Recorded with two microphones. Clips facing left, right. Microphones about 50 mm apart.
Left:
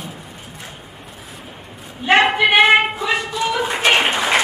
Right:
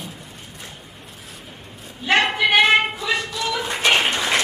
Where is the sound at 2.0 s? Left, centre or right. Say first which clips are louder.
Left 4 dB; centre.